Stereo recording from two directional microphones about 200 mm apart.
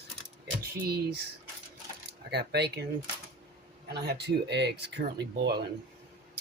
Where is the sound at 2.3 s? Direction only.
55° right (ahead or behind).